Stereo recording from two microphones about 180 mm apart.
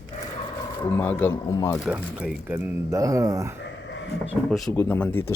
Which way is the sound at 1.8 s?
5° right (ahead or behind).